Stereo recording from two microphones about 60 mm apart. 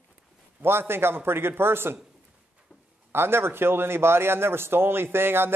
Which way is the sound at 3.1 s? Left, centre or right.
Right.